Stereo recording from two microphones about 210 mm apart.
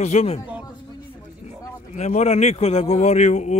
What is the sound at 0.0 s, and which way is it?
Speech, 30° left (ahead or behind).